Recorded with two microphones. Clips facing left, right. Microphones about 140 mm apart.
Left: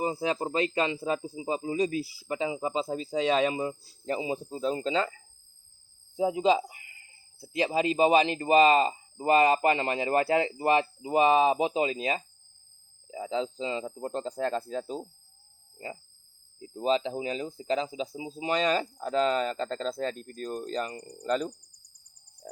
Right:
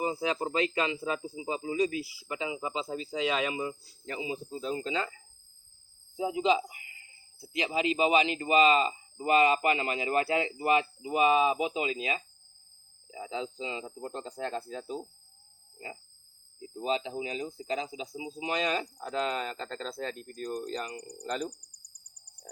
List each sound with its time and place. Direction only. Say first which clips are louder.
0.0 s speech: left 2 dB; 35° left (ahead or behind)
6.1 s speech: left 3 dB; 35° left (ahead or behind)
16.6 s speech: left 5 dB; 35° left (ahead or behind)
21.6 s speech: right 1 dB; 75° right (ahead or behind)